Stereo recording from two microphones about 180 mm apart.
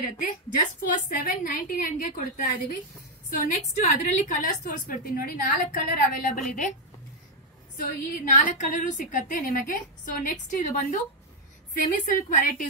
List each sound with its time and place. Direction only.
0.2 s a woman's voice: 45° left (ahead or behind)
7.7 s a woman's voice: 45° left (ahead or behind)
12.2 s a woman's voice: 50° left (ahead or behind)